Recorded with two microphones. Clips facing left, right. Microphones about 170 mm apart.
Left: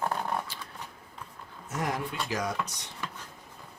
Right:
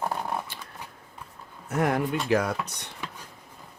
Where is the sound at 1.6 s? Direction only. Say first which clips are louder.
Right 7 dB; 60° right (ahead or behind).